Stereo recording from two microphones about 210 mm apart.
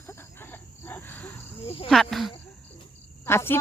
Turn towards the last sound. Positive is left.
turn(degrees=10)  # may be behind; listen again after turning